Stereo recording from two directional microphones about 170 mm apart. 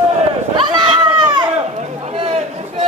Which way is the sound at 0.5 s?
30° right (ahead or behind).